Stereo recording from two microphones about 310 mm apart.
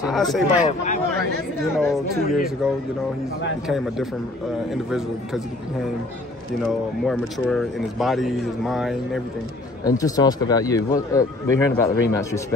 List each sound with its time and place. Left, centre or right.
0.0 s speech: centre
0.7 s speech: left
1.7 s speech: centre
2.2 s speech: left
3.6 s speech: centre
6.6 s speech: centre
9.8 s speech: centre